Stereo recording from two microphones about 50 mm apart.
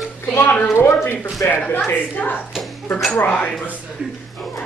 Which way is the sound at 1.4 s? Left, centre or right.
Left.